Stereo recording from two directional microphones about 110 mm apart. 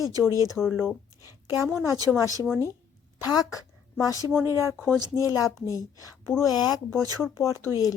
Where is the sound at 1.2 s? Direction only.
25° right (ahead or behind).